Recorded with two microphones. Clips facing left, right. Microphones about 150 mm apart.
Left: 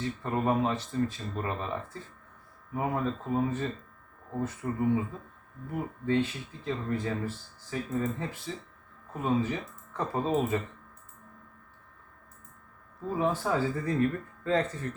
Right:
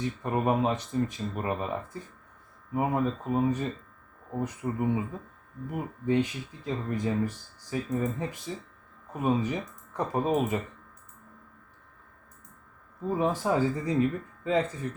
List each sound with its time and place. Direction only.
0.0 s speech: 15° right (ahead or behind)
13.1 s speech: 15° right (ahead or behind)